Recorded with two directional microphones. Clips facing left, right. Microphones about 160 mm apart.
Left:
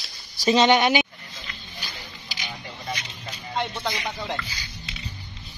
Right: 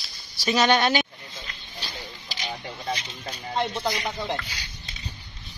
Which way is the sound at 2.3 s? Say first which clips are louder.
Right 3 dB; 30° right (ahead or behind).